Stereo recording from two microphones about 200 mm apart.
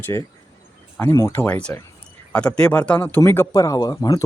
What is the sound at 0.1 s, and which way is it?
Speech, 20° left (ahead or behind).